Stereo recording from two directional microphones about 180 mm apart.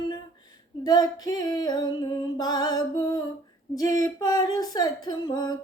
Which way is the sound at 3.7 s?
20° left (ahead or behind).